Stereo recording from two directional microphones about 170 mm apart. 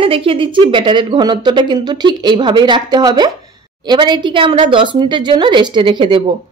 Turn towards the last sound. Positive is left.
turn(degrees=-30)  # may be behind; listen again after turning